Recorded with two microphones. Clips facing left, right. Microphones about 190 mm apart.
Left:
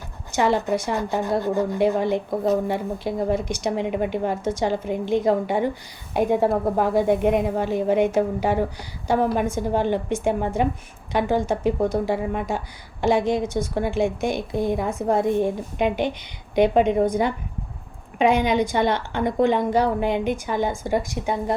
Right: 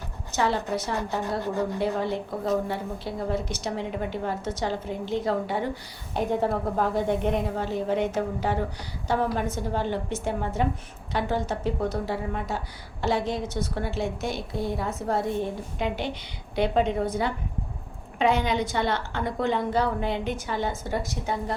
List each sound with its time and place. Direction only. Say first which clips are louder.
0.3 s a woman's voice: left 5 dB; 15° left (ahead or behind)